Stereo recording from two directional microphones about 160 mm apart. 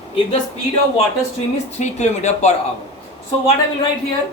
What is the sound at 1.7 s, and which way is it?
Speech, 45° left (ahead or behind).